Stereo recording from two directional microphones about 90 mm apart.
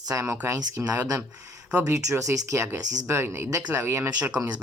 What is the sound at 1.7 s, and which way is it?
Speech, 30° right (ahead or behind).